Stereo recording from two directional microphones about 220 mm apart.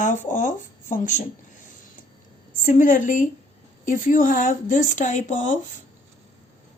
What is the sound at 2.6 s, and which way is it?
Speech, 35° left (ahead or behind).